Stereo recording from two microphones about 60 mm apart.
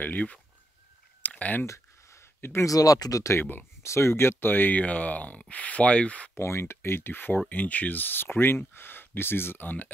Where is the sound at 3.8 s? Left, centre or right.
Left.